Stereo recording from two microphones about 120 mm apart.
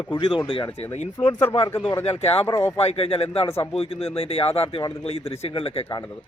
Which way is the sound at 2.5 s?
20° left (ahead or behind).